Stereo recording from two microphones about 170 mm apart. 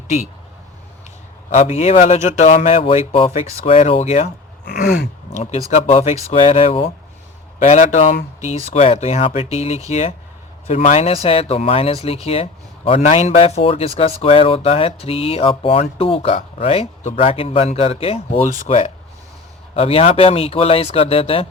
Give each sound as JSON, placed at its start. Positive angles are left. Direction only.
{"t": 1.5, "sound": "speech", "side_deg": 40}
{"t": 4.6, "sound": "a sound", "side_deg": 60}
{"t": 5.4, "sound": "speech", "side_deg": 40}
{"t": 19.7, "sound": "speech", "side_deg": 35}